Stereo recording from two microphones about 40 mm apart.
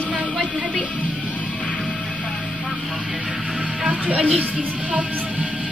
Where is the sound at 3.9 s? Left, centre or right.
Right.